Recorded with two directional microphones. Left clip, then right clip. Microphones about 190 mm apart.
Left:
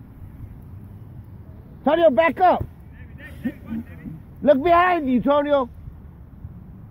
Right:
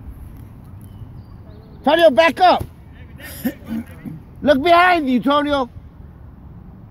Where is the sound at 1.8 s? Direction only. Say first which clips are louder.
Right 4 dB; 40° left (ahead or behind).